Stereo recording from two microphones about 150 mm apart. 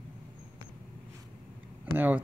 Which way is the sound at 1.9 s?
10° right (ahead or behind).